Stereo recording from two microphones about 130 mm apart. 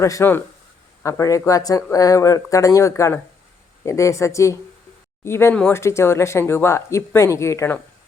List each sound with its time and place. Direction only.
0.0 s speech: 20° left (ahead or behind)